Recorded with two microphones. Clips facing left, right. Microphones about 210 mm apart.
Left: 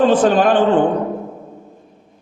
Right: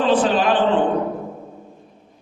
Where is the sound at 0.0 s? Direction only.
45° left (ahead or behind).